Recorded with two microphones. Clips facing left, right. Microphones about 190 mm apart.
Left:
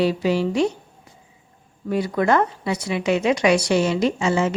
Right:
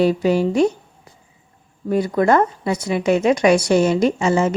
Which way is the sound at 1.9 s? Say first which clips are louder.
Right 3 dB; 45° right (ahead or behind).